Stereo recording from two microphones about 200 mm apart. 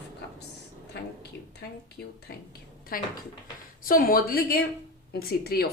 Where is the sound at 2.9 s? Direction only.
45° left (ahead or behind).